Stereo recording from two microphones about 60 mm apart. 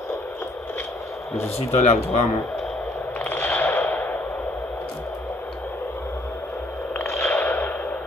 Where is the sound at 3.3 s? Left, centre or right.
Left.